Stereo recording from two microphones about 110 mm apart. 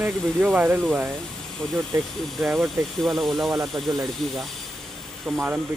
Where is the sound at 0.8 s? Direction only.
Centre (ahead or behind).